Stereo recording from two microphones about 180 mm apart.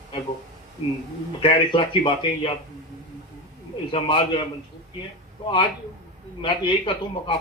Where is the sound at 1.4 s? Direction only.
30° left (ahead or behind).